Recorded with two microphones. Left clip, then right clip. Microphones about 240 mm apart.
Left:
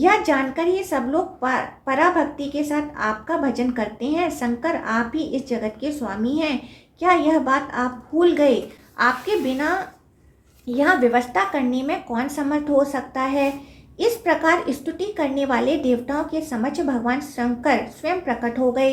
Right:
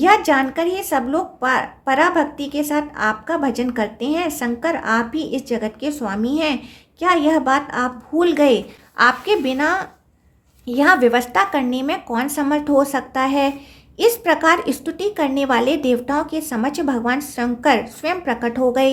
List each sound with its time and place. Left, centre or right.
0.0 s a woman's voice: right